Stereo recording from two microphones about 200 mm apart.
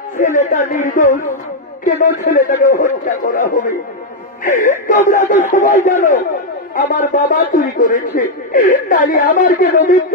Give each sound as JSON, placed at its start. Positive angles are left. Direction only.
{"t": 0.2, "sound": "speech", "side_deg": 40}